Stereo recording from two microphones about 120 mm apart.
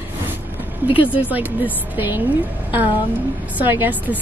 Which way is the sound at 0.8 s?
45° left (ahead or behind).